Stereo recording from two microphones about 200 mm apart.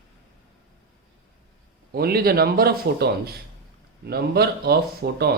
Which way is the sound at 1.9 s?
50° right (ahead or behind).